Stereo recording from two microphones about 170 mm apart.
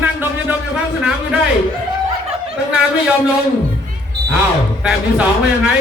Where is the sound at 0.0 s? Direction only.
10° right (ahead or behind).